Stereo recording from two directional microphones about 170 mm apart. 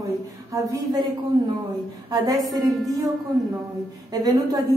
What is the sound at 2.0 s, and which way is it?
Speech, 20° right (ahead or behind).